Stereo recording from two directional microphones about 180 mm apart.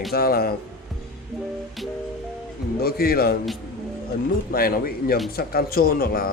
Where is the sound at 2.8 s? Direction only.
60° left (ahead or behind).